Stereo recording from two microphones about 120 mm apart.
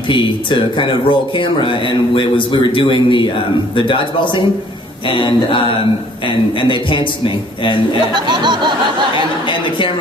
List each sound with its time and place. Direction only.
0.1 s speech: 40° left (ahead or behind)
8.3 s a sound: 40° right (ahead or behind)
9.5 s speech: 45° left (ahead or behind)